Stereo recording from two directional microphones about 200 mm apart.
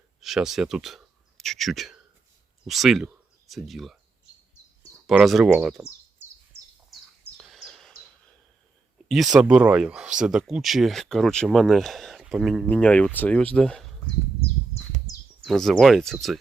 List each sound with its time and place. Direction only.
0.2 s speech: centre (ahead or behind)
5.0 s speech: centre (ahead or behind)
7.3 s a sound: centre (ahead or behind)
9.0 s speech: centre (ahead or behind)
15.1 s bird: 20° left (ahead or behind)
15.4 s speech: centre (ahead or behind)